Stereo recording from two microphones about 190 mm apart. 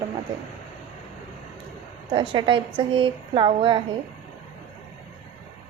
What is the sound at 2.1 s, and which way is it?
A woman's voice, 25° right (ahead or behind).